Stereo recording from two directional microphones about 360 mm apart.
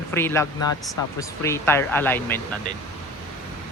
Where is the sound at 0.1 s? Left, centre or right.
Centre.